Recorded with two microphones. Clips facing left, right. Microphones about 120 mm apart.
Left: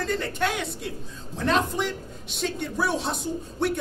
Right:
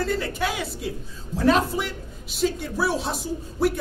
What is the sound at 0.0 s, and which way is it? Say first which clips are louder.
A man's voice: right 1 dB; 5° right (ahead or behind).